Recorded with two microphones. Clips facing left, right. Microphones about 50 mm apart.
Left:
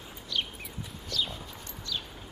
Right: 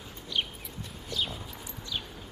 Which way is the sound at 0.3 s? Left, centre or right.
Right.